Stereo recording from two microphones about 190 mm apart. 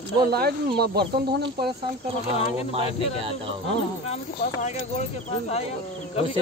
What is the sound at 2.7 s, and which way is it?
Speech, 30° right (ahead or behind).